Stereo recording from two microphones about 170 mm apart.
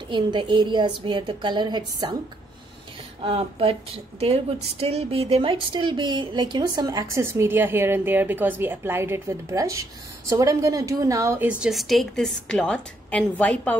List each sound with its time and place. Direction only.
0.1 s speech: 25° right (ahead or behind)
3.3 s speech: 35° right (ahead or behind); by 11.5 s 15° right (ahead or behind)
11.6 s a woman's voice: centre (ahead or behind)